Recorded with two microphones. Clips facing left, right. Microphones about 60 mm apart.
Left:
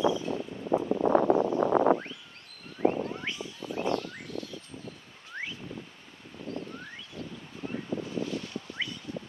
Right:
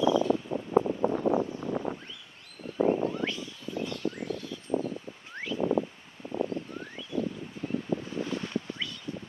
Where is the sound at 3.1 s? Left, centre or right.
Left.